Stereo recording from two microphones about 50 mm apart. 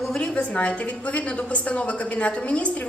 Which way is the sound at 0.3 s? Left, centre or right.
Left.